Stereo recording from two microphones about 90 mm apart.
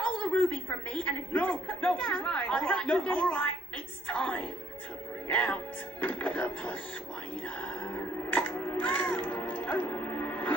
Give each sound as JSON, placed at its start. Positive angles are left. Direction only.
{"t": 0.0, "sound": "a woman's voice", "side_deg": 10}
{"t": 5.3, "sound": "music", "side_deg": 15}